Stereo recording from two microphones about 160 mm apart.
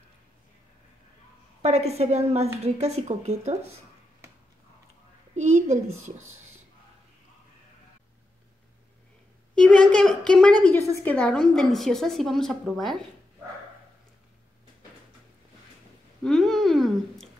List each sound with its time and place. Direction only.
1.6 s a woman's voice: 45° right (ahead or behind)
5.3 s a woman's voice: 50° right (ahead or behind)
9.6 s a woman's voice: 5° left (ahead or behind)
16.2 s a sound: 5° left (ahead or behind)